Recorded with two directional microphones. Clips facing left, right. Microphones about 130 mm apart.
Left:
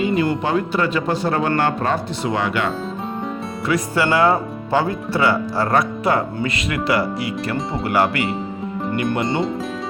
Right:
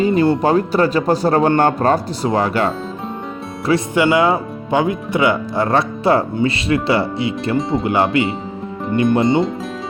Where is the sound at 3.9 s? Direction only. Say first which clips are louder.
Right 1 dB; 15° right (ahead or behind).